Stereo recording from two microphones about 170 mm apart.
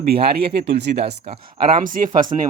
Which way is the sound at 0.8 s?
90° right.